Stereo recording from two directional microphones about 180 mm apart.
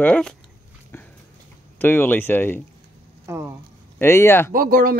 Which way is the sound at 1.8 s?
10° left (ahead or behind).